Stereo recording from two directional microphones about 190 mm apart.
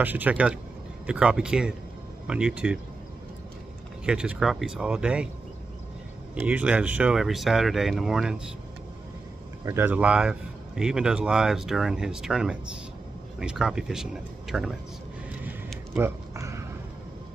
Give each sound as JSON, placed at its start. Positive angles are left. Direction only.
{"t": 0.0, "sound": "speech", "side_deg": -10}
{"t": 4.0, "sound": "speech", "side_deg": -5}
{"t": 6.3, "sound": "speech", "side_deg": -5}
{"t": 9.7, "sound": "speech", "side_deg": -10}
{"t": 16.0, "sound": "a sound", "side_deg": -15}